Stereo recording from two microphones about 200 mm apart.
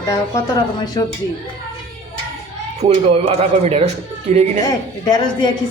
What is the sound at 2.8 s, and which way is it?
Speech, 30° right (ahead or behind).